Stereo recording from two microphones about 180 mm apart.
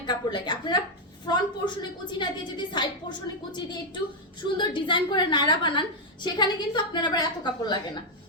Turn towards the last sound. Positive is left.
turn(degrees=25)  # may be behind; listen again after turning